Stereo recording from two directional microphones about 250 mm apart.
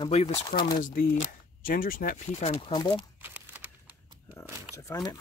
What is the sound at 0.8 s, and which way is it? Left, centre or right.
Speech, left.